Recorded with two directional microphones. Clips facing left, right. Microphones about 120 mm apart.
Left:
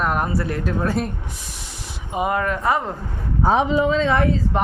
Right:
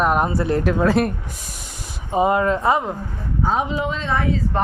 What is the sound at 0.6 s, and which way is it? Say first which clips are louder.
Speech: right 5 dB; 90° right.